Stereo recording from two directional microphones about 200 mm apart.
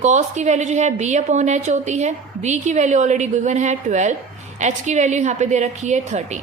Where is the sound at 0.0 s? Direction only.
35° right (ahead or behind).